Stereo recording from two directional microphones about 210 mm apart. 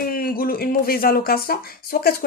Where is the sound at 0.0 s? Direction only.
45° left (ahead or behind).